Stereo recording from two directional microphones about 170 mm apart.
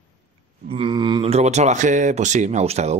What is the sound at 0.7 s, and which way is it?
Speech, 30° right (ahead or behind).